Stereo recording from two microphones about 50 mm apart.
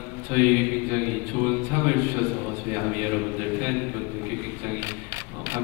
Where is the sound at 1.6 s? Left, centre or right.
Right.